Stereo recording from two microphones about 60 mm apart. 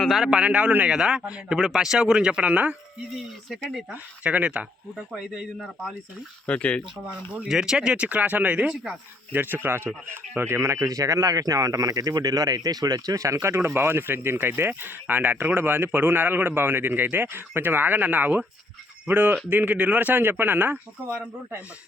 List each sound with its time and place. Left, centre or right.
0.3 s speech: centre
0.9 s speech: centre
1.5 s speech: centre
3.1 s speech: centre
3.9 s speech: right
5.2 s speech: centre
6.4 s speech: left
7.4 s speech: centre
8.7 s speech: centre
9.3 s speech: right
13.4 s speech: right